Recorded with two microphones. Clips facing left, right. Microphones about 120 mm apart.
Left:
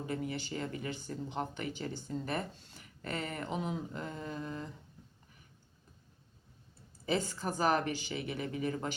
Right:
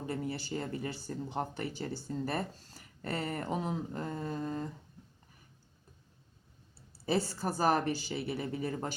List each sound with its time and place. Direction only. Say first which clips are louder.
0.1 s speech: right 2 dB; 35° right (ahead or behind)
7.0 s speech: right 2 dB; 35° right (ahead or behind)